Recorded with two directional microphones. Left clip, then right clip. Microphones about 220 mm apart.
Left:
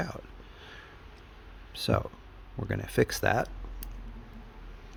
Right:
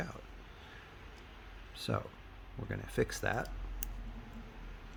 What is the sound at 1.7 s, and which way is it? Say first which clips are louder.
Speech: left 9 dB; 45° left (ahead or behind).